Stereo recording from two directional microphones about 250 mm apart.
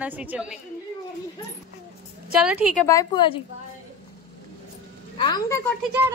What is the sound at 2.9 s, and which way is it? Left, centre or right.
Speech, centre.